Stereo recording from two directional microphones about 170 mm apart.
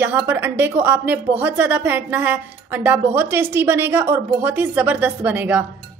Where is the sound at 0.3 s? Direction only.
10° right (ahead or behind).